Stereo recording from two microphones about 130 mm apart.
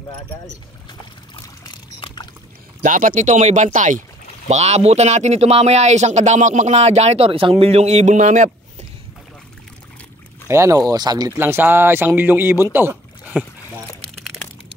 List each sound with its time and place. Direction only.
1.6 s pour: 35° left (ahead or behind)
2.8 s speech: 90° right; by 4.0 s 70° right (ahead or behind)
4.5 s speech: 60° right (ahead or behind)
10.5 s speech: 25° right (ahead or behind)
11.3 s speech: 15° right (ahead or behind)
12.7 s rowboat: 15° right (ahead or behind)